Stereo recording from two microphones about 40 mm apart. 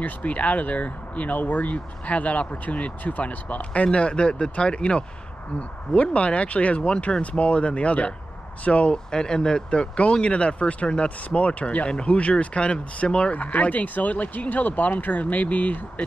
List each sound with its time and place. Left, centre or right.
0.0 s speech: left
8.9 s speech: centre
13.4 s speech: left